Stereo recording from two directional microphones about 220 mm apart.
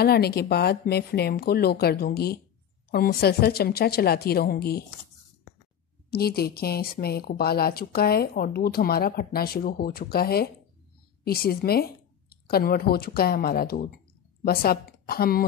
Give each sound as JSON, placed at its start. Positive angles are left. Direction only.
{"t": 0.0, "sound": "a woman's voice", "side_deg": 45}
{"t": 6.0, "sound": "a woman's voice", "side_deg": 45}